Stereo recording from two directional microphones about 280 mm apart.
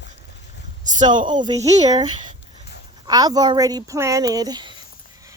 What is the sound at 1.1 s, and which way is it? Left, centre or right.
Speech, centre.